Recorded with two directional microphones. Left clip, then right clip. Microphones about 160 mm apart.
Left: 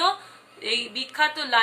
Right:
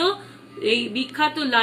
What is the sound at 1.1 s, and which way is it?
Speech, 20° left (ahead or behind).